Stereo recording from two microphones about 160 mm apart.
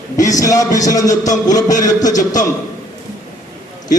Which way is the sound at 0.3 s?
20° left (ahead or behind).